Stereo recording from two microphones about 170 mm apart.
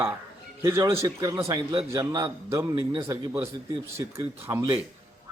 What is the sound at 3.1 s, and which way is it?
Speech, 15° right (ahead or behind).